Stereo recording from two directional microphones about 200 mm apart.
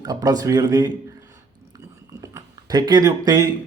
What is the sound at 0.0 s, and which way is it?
Speech, 20° right (ahead or behind).